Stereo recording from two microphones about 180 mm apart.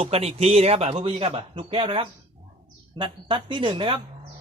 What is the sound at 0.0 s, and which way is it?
Speech, 35° right (ahead or behind).